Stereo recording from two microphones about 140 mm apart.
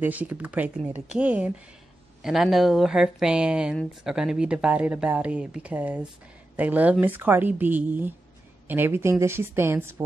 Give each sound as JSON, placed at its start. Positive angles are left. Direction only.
{"t": 0.0, "sound": "speech", "side_deg": -10}